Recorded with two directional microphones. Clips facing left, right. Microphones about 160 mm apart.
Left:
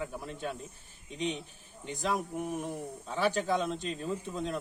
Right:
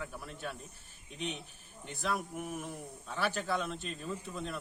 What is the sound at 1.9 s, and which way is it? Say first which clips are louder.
Speech: left 4 dB; 15° left (ahead or behind).